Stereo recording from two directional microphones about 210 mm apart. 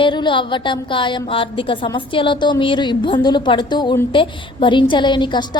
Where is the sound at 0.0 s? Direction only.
20° left (ahead or behind).